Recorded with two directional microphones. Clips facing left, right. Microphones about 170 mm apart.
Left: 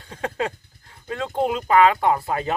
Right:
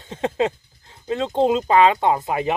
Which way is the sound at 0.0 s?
20° right (ahead or behind).